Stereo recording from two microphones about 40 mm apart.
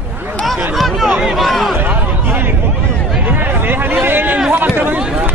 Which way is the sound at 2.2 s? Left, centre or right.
Right.